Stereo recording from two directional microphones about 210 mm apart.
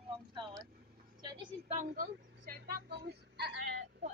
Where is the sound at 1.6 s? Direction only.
40° right (ahead or behind).